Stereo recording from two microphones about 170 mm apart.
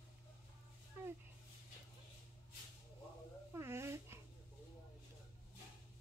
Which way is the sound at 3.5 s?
15° right (ahead or behind).